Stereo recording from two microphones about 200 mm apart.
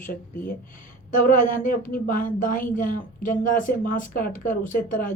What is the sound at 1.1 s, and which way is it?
A woman's voice, 40° left (ahead or behind).